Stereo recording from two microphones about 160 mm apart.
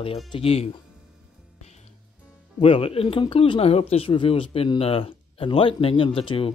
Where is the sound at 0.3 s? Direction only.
35° left (ahead or behind).